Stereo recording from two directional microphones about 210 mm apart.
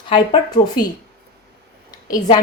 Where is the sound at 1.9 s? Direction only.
20° left (ahead or behind).